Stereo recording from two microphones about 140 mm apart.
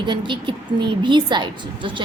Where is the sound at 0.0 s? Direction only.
35° right (ahead or behind).